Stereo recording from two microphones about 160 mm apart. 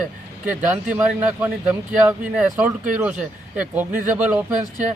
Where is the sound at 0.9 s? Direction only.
10° right (ahead or behind).